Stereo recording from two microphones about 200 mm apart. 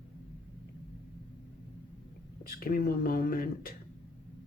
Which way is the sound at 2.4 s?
45° left (ahead or behind).